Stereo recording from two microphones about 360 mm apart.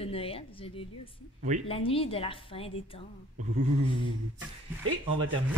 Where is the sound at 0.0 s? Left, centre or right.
Centre.